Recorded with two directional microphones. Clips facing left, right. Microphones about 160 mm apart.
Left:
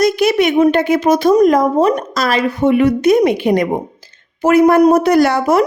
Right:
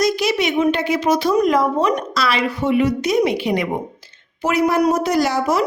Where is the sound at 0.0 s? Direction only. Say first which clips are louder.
Left 6 dB; 55° left (ahead or behind).